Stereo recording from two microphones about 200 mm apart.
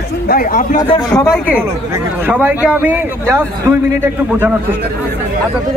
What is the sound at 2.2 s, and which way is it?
A man's voice, 10° right (ahead or behind).